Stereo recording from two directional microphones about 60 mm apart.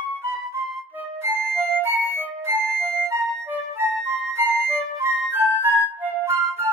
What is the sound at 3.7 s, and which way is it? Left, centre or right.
Music, right.